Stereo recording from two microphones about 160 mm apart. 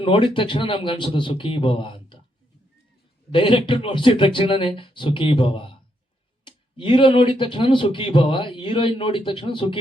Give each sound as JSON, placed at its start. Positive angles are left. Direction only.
{"t": 0.0, "sound": "speech", "side_deg": 30}
{"t": 3.3, "sound": "speech", "side_deg": 30}